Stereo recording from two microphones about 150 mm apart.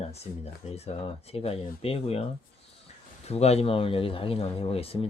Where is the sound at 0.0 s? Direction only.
45° left (ahead or behind).